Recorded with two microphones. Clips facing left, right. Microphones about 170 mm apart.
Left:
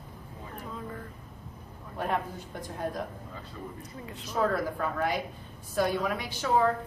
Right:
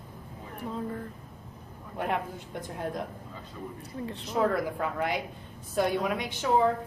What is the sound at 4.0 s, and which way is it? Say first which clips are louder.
Speech: right 9 dB; 30° right (ahead or behind).